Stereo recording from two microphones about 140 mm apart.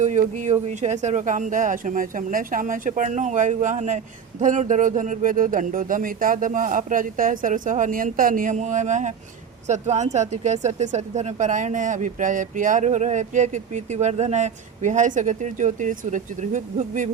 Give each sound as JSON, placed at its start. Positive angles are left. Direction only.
{"t": 0.0, "sound": "speech", "side_deg": -60}